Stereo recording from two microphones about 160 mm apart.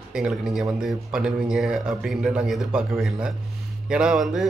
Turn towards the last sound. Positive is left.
turn(degrees=0)  # may be behind; listen again after turning